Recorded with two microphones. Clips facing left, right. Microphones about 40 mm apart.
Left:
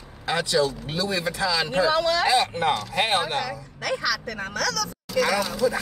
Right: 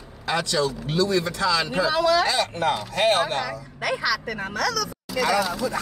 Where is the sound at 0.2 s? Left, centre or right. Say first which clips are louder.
Left 1 dB; centre.